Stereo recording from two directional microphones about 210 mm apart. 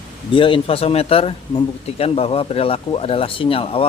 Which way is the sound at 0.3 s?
25° left (ahead or behind).